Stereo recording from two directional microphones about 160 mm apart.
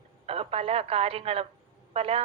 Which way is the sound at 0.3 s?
35° right (ahead or behind).